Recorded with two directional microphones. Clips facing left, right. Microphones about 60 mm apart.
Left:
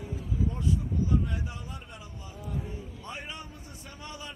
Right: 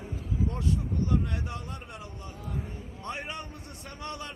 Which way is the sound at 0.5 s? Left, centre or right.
Right.